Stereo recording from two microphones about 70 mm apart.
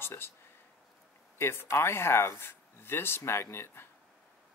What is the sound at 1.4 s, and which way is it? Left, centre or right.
Speech, left.